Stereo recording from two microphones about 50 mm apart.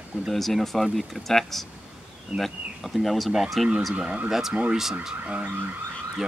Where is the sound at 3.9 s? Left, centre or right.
Right.